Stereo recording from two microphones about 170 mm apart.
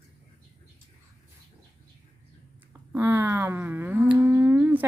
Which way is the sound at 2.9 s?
15° right (ahead or behind).